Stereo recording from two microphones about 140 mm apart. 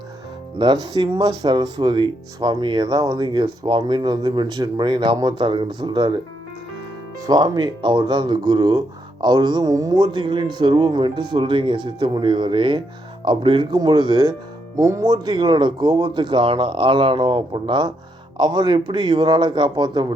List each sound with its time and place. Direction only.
0.6 s speech: 35° right (ahead or behind)
7.2 s speech: 30° right (ahead or behind)